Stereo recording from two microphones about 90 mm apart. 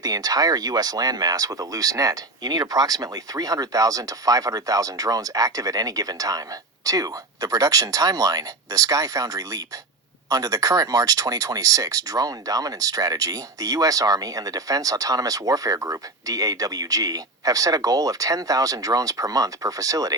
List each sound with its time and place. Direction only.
0.0 s speech: 45° right (ahead or behind)